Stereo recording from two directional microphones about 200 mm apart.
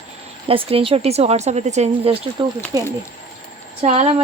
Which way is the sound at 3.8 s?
35° right (ahead or behind).